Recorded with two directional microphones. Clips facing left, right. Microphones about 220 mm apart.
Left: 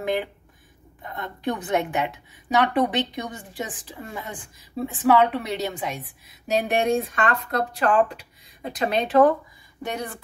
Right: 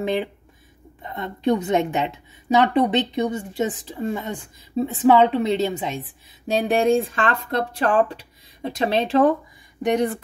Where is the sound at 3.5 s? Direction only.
25° right (ahead or behind).